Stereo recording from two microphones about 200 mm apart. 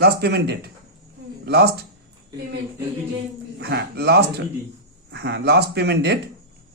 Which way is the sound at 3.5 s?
55° right (ahead or behind).